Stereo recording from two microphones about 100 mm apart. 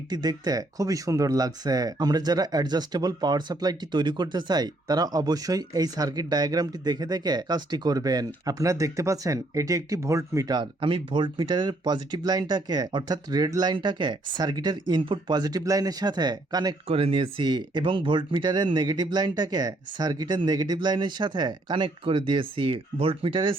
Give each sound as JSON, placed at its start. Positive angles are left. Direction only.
{"t": 0.1, "sound": "speech", "side_deg": -40}
{"t": 10.6, "sound": "speech", "side_deg": -55}
{"t": 16.9, "sound": "speech", "side_deg": -65}